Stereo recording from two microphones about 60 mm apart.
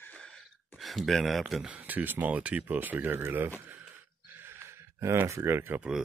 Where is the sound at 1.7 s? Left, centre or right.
Right.